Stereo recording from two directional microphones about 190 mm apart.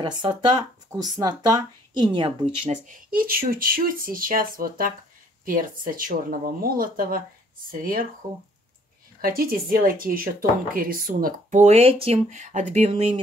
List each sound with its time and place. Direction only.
0.0 s speech: 25° right (ahead or behind)
3.2 s speech: 50° right (ahead or behind)
9.2 s speech: 50° right (ahead or behind); by 13.2 s 30° right (ahead or behind)